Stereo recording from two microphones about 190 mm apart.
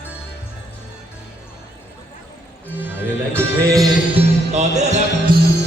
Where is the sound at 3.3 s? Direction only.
15° right (ahead or behind).